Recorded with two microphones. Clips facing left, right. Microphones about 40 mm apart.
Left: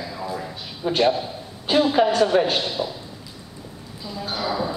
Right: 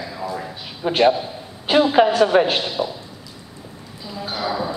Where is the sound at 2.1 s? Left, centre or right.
Centre.